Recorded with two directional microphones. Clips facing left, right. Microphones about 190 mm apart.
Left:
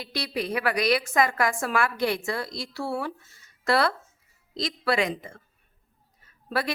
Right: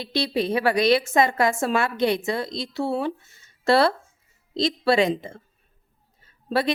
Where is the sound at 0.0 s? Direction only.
25° right (ahead or behind).